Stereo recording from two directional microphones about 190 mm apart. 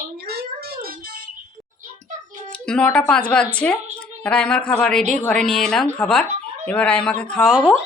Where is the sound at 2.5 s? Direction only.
5° left (ahead or behind).